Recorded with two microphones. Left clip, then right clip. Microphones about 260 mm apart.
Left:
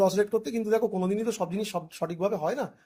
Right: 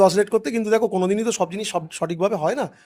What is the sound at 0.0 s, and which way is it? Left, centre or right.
Speech, right.